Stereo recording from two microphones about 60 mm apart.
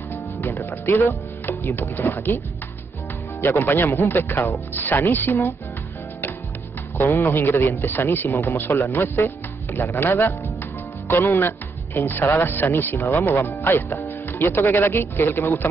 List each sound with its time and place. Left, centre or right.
0.1 s music: left
0.6 s speech: left
7.2 s speech: left
13.9 s music: left
14.7 s speech: left